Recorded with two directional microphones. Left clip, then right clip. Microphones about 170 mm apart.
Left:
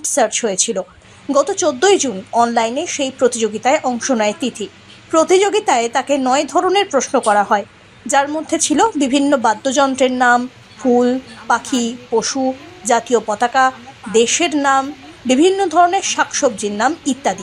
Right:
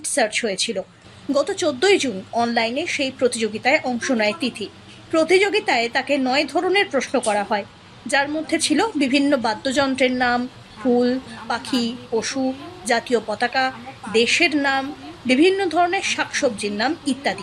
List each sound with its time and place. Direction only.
0.0 s a woman's voice: 15° left (ahead or behind)